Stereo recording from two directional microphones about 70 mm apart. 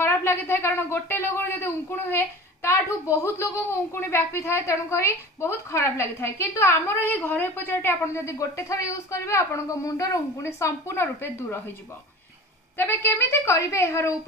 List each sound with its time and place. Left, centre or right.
0.0 s a woman's voice: left
12.7 s a woman's voice: left